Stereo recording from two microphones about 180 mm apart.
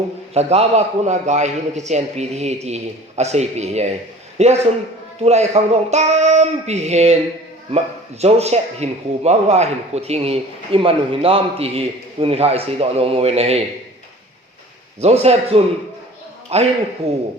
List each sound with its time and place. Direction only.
0.3 s a man's voice: 35° right (ahead or behind)
8.2 s a man's voice: 35° right (ahead or behind)
15.0 s a man's voice: 35° right (ahead or behind)